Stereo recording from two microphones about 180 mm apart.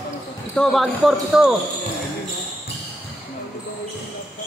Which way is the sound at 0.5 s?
Centre (ahead or behind).